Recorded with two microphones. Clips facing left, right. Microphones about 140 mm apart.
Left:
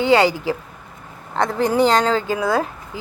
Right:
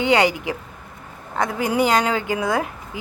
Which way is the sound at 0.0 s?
20° right (ahead or behind).